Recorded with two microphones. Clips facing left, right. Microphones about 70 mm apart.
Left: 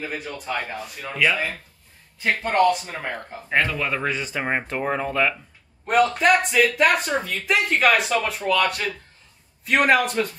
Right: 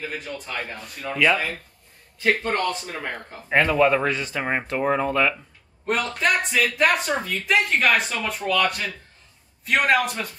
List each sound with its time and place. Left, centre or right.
0.0 s speech: centre
2.2 s speech: centre
3.4 s speech: centre